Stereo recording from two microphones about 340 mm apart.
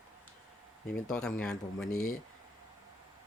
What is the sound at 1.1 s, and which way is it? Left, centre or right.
Speech, centre.